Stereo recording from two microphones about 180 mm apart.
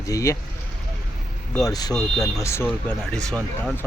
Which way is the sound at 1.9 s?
5° left (ahead or behind).